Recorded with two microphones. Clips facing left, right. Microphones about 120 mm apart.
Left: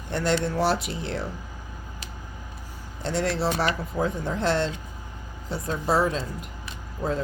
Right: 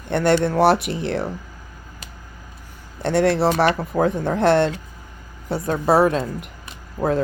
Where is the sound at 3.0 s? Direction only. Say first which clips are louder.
Right 8 dB; 60° right (ahead or behind).